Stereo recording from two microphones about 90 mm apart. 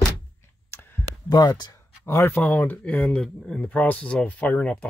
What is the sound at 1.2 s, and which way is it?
Speech, 45° left (ahead or behind).